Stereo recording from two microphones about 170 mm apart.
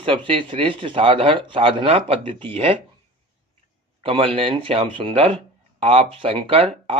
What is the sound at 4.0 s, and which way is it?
Speech, 30° right (ahead or behind).